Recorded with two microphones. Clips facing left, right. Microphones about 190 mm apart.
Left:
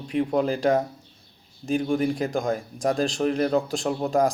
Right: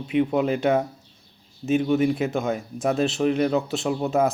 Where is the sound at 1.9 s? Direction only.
5° right (ahead or behind).